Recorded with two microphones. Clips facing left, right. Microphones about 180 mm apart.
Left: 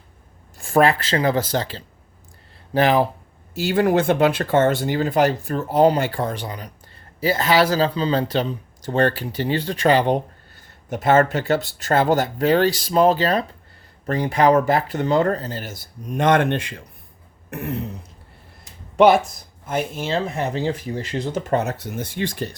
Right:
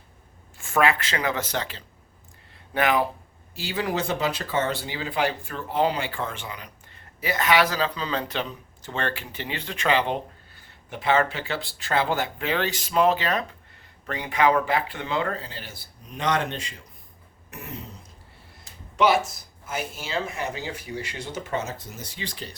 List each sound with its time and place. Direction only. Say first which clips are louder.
0.6 s speech: left 6 dB; 35° left (ahead or behind)
3.5 s speech: left 10 dB; 50° left (ahead or behind); by 18.0 s 65° left (ahead or behind)
19.6 s speech: left 8 dB; 55° left (ahead or behind)
20.5 s speech: left 9 dB; 40° left (ahead or behind)
21.5 s speech: left 8 dB; 65° left (ahead or behind); by 22.5 s 50° left (ahead or behind)